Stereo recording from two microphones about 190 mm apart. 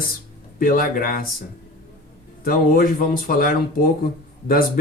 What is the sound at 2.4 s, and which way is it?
Speech, 50° left (ahead or behind).